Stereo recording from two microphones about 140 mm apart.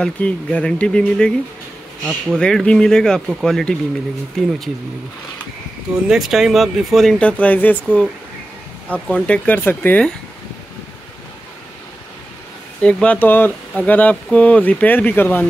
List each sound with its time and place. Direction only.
0.0 s speech: 5° left (ahead or behind)
6.0 s speech: centre (ahead or behind)
12.8 s speech: 10° left (ahead or behind)